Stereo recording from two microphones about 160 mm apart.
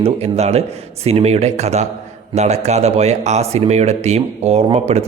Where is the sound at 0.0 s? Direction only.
40° right (ahead or behind).